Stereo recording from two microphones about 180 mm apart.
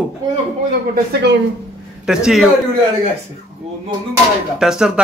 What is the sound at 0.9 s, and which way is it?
Speech, 70° right (ahead or behind).